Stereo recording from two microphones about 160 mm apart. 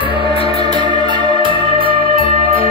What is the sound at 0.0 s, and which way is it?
Music, 35° left (ahead or behind).